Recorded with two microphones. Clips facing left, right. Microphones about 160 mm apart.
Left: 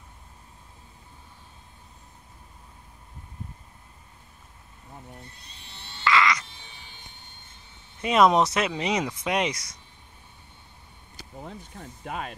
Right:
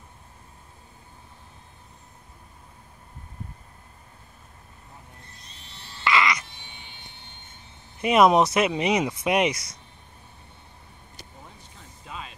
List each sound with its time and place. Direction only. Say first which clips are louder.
6.0 s frog: even; 15° right (ahead or behind)
6.8 s vehicle: right 2 dB; 40° left (ahead or behind)
8.0 s speech: right 2 dB; 10° right (ahead or behind)
11.4 s a sound: left 8 dB; 55° left (ahead or behind)